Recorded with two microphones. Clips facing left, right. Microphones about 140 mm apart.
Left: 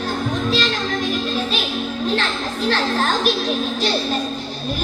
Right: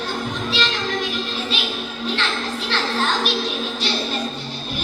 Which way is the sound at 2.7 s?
45° left (ahead or behind).